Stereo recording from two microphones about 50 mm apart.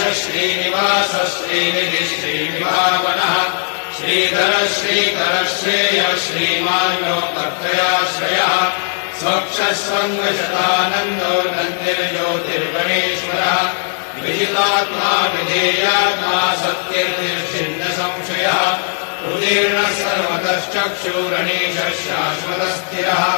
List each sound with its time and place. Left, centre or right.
0.7 s mantra: right
14.5 s chant: right
18.4 s mantra: right